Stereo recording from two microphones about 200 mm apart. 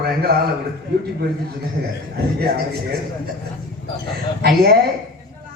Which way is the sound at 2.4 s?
50° right (ahead or behind).